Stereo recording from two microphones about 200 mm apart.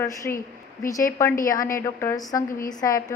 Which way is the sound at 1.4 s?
15° left (ahead or behind).